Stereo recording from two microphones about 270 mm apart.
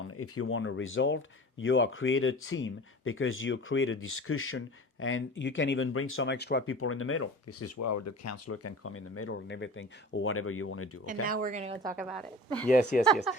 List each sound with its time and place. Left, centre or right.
0.2 s speech: left
7.8 s speech: left
11.3 s speech: right; by 12.0 s centre
12.9 s speech: left